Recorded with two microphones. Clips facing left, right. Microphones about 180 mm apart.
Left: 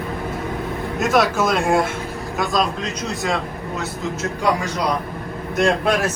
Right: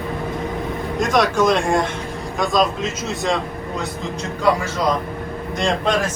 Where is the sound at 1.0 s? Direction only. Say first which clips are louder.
Right 1 dB; 5° left (ahead or behind).